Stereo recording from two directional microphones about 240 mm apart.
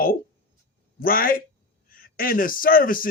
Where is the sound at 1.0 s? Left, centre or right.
Left.